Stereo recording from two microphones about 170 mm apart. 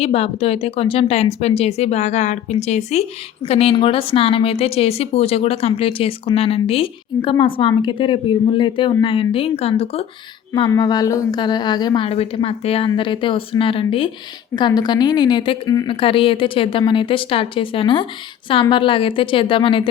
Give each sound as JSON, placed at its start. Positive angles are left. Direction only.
{"t": 0.0, "sound": "speech", "side_deg": 35}
{"t": 10.5, "sound": "a woman's voice", "side_deg": 25}